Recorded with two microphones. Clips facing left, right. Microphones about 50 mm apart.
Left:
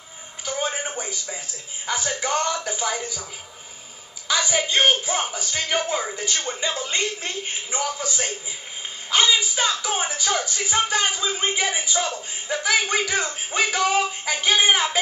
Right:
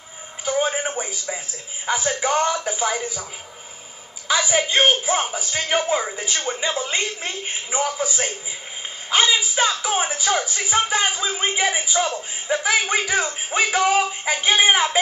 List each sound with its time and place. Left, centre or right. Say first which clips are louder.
0.5 s television: right 5 dB; centre
1.9 s speech: right 4 dB; centre
4.3 s speech: right 3 dB; centre